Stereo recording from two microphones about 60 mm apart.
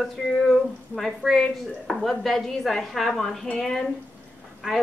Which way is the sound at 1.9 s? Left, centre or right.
Centre.